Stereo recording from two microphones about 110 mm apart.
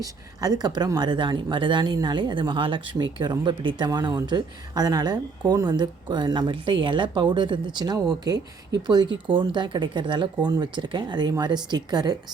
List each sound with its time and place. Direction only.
0.0 s speech: 35° right (ahead or behind)